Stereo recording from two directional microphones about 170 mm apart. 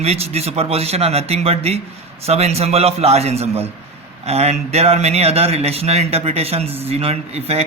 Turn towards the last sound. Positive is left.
turn(degrees=-40)  # may be behind; listen again after turning